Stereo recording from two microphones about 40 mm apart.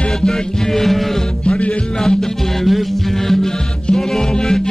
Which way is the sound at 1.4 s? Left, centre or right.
Left.